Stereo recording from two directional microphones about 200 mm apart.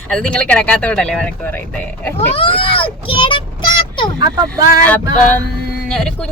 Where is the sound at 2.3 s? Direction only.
25° left (ahead or behind).